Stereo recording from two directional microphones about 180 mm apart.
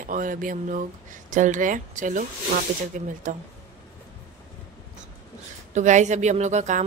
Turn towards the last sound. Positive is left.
turn(degrees=-40)  # may be behind; listen again after turning